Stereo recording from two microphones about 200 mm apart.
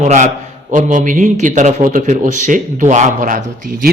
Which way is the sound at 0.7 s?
40° right (ahead or behind).